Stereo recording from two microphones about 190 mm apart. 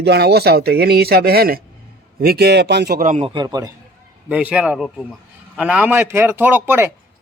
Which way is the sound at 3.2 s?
20° right (ahead or behind).